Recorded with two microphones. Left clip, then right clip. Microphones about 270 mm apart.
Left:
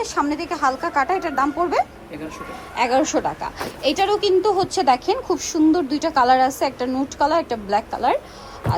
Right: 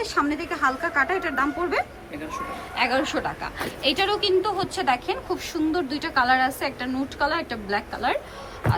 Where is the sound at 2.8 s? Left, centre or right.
Centre.